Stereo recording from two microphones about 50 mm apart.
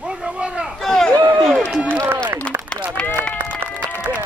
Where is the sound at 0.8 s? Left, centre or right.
Centre.